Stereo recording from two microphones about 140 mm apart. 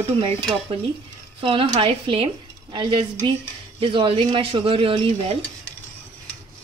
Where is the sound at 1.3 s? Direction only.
40° right (ahead or behind).